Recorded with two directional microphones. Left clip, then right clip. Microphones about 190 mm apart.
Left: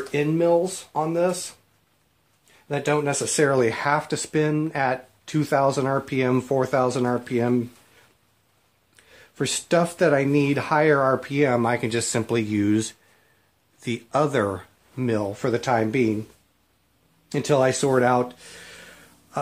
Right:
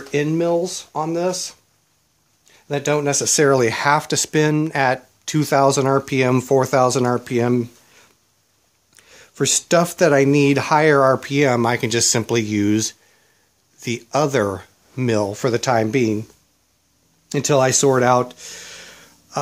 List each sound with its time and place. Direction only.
0.1 s speech: 60° right (ahead or behind)
2.7 s speech: 60° right (ahead or behind)
8.9 s speech: 55° right (ahead or behind); by 15.0 s 35° right (ahead or behind)
15.0 s speech: 50° right (ahead or behind)
17.3 s speech: 55° right (ahead or behind)